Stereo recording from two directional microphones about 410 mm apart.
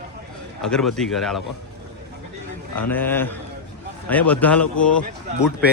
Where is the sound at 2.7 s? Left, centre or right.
Centre.